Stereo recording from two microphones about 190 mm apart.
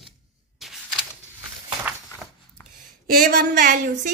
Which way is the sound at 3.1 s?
45° right (ahead or behind).